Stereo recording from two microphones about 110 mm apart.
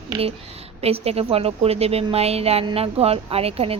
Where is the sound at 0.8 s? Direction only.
65° right (ahead or behind).